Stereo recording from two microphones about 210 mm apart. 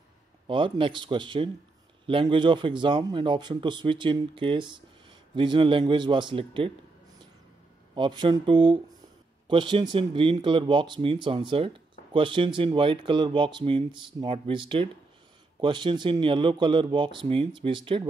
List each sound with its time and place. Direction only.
0.5 s speech: 25° right (ahead or behind)
7.9 s speech: 20° right (ahead or behind)